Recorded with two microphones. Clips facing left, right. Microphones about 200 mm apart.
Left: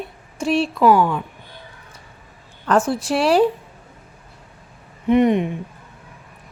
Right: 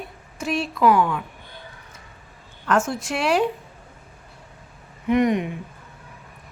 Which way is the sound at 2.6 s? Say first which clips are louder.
Left 4 dB; 35° left (ahead or behind).